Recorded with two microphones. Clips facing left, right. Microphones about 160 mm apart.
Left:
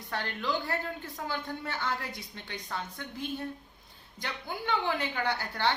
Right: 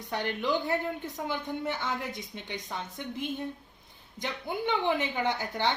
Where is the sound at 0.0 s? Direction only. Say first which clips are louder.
Right 3 dB; 20° right (ahead or behind).